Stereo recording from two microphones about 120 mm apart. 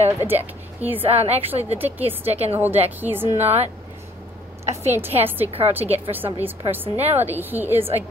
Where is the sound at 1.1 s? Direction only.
60° right (ahead or behind).